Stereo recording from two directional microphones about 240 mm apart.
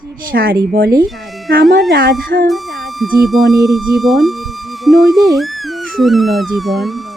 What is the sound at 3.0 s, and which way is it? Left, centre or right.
Speech, centre.